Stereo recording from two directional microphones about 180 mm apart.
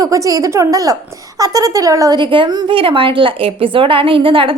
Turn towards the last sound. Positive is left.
turn(degrees=-30)  # may be behind; listen again after turning